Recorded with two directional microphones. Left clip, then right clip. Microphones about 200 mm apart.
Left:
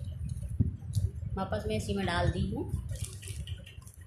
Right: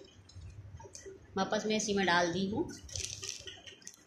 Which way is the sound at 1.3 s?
20° right (ahead or behind).